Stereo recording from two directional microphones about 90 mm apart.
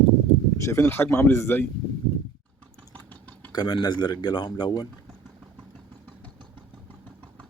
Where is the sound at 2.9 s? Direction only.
15° left (ahead or behind).